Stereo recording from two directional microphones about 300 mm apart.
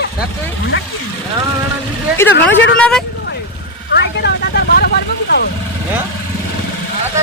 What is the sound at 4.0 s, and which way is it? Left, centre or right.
Speech, left.